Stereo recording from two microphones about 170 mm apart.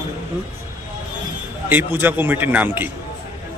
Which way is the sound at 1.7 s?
10° right (ahead or behind).